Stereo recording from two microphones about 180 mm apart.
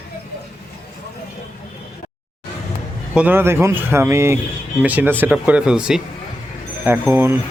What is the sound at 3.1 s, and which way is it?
Speech, 10° right (ahead or behind).